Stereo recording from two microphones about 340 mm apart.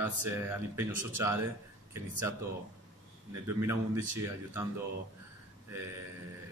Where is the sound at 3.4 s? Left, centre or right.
Centre.